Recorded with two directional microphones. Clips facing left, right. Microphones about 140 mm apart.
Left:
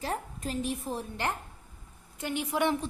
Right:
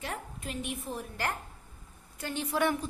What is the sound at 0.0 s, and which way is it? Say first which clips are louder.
A woman's voice: left 5 dB; 35° left (ahead or behind).